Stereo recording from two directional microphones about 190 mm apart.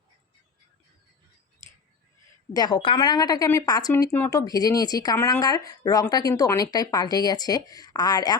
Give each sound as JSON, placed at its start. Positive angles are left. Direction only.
{"t": 2.5, "sound": "speech", "side_deg": 20}